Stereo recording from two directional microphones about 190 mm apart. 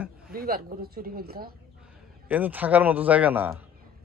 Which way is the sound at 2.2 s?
10° right (ahead or behind).